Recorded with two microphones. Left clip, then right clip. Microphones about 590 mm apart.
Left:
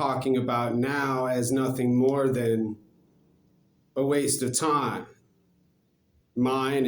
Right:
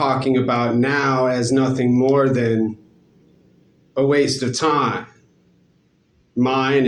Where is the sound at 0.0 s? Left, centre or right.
Left.